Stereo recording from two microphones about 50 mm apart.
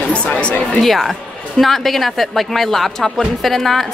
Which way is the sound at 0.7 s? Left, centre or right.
Centre.